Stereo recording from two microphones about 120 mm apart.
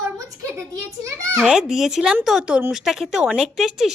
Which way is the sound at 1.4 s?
5° right (ahead or behind).